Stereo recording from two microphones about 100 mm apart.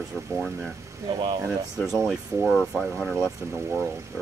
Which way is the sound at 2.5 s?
Centre (ahead or behind).